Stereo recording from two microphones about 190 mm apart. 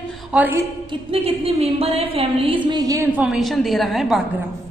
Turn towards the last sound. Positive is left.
turn(degrees=0)  # may be behind; listen again after turning